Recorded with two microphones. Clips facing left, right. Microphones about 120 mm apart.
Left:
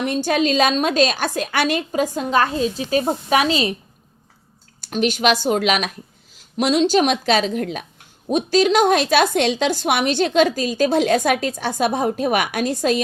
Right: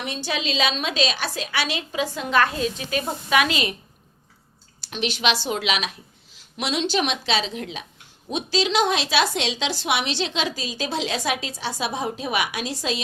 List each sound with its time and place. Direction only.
0.0 s a woman's voice: 50° left (ahead or behind)
2.1 s speech: 35° left (ahead or behind)
4.8 s a woman's voice: 45° left (ahead or behind)